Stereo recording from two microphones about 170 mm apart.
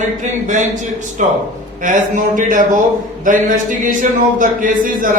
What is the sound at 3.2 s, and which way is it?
Speech, 50° right (ahead or behind).